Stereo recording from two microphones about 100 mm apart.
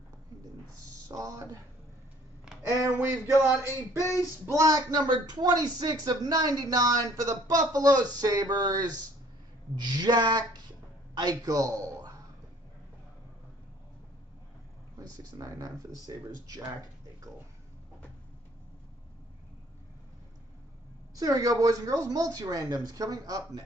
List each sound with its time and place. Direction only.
1.0 s speech: 35° right (ahead or behind)
2.8 s a sound: 30° right (ahead or behind)
4.5 s speech: 35° right (ahead or behind)
9.8 s a sound: 45° right (ahead or behind)
11.1 s speech: 40° right (ahead or behind)
15.0 s speech: 40° right (ahead or behind)
21.2 s speech: 35° right (ahead or behind)